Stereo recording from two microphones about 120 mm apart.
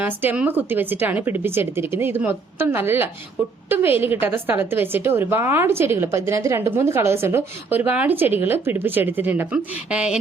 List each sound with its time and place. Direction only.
0.0 s a woman's voice: 15° right (ahead or behind)